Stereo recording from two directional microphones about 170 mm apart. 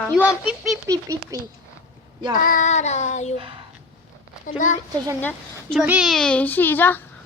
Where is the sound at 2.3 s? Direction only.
55° left (ahead or behind).